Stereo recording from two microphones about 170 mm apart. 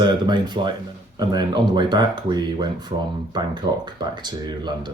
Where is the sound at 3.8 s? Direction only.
25° right (ahead or behind).